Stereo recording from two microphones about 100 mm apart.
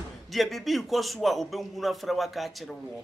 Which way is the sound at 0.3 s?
Centre (ahead or behind).